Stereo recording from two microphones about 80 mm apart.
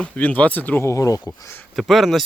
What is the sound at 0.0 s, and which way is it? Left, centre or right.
Speech, centre.